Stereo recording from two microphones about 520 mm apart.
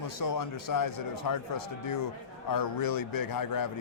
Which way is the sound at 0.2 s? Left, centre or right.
Left.